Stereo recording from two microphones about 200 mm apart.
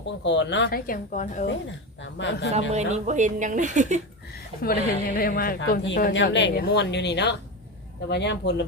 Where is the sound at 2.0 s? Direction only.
65° left (ahead or behind).